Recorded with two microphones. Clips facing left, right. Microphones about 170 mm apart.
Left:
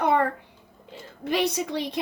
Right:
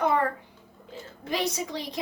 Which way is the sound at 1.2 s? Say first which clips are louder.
Left 4 dB; 60° left (ahead or behind).